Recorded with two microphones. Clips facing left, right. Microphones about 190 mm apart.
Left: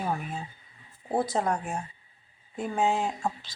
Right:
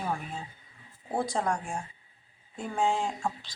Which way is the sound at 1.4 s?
10° left (ahead or behind).